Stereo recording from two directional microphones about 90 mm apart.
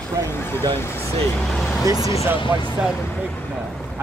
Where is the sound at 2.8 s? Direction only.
15° right (ahead or behind).